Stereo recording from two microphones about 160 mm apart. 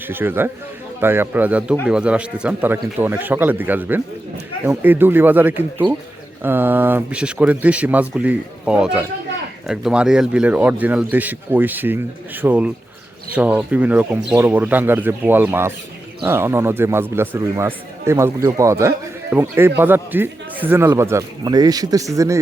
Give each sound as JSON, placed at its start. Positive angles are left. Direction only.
{"t": 0.1, "sound": "speech", "side_deg": -15}